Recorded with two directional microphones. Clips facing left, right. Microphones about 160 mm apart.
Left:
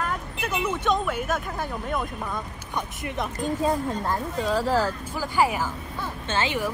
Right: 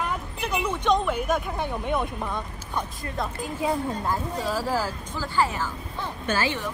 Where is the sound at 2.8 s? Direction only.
20° left (ahead or behind).